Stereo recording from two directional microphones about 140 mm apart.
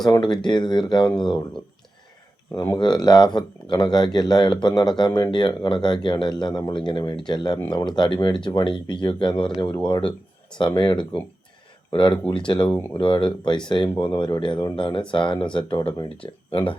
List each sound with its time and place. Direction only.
0.4 s speech: 35° left (ahead or behind)
2.5 s speech: 20° left (ahead or behind)
2.7 s speech: 30° left (ahead or behind)
10.8 s speech: 35° left (ahead or behind)